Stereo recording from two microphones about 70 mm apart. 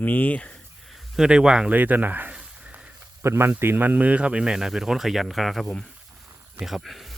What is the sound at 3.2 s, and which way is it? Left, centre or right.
Speech, right.